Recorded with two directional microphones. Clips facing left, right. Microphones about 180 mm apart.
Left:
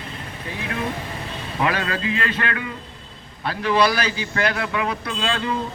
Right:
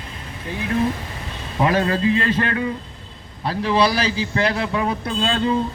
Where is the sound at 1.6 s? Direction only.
30° right (ahead or behind).